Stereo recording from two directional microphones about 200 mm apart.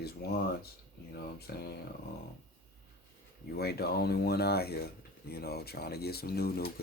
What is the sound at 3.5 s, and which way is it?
Speech, 55° left (ahead or behind).